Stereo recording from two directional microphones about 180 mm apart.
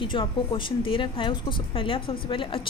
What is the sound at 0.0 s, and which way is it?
A woman's voice, 30° left (ahead or behind).